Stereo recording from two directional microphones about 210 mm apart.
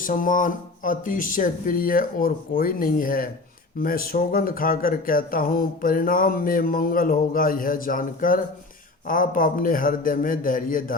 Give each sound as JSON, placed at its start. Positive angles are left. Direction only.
{"t": 0.0, "sound": "speech", "side_deg": 40}